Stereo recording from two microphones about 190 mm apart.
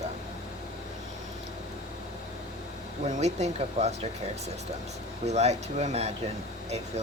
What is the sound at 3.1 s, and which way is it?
Speech, 35° right (ahead or behind).